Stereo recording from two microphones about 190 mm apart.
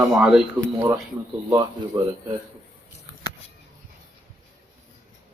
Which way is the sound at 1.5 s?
15° right (ahead or behind).